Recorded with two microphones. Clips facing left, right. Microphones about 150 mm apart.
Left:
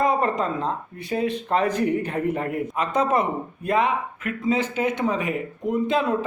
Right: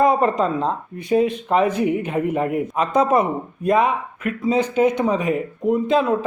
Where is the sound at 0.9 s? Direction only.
15° right (ahead or behind).